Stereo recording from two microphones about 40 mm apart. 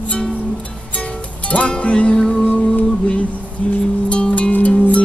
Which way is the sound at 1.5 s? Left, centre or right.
Left.